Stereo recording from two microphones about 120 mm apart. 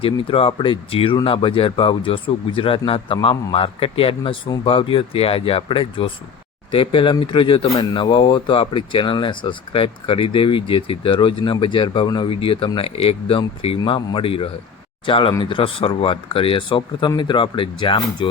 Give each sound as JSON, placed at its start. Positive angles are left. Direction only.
{"t": 0.0, "sound": "speech", "side_deg": 50}